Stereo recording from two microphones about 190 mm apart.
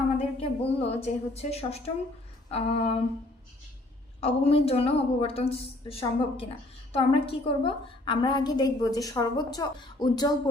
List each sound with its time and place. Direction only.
0.3 s a woman's voice: 35° left (ahead or behind)
4.2 s a woman's voice: 30° left (ahead or behind)